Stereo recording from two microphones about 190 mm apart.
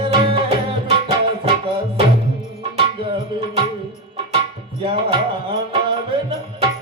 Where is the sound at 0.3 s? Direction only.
30° right (ahead or behind).